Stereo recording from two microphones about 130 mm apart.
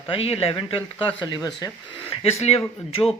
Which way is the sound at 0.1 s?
50° left (ahead or behind).